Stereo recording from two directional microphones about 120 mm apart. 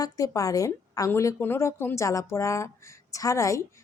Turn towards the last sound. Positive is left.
turn(degrees=25)  # may be behind; listen again after turning